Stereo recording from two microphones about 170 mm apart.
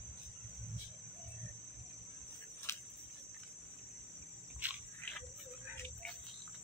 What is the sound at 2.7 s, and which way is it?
Cricket, 15° left (ahead or behind).